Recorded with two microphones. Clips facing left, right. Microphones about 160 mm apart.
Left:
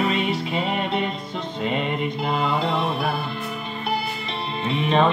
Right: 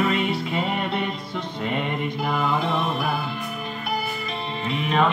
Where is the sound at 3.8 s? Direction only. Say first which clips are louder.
Left 2 dB; 30° left (ahead or behind).